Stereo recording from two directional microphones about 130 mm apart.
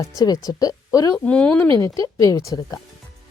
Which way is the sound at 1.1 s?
10° left (ahead or behind).